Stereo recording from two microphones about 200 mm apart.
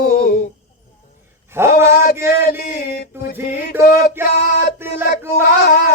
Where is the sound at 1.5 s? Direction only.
10° right (ahead or behind).